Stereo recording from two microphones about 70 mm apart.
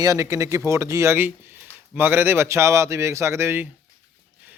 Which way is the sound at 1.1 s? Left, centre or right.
Right.